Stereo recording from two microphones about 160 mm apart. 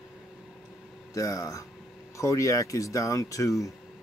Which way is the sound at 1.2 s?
20° left (ahead or behind).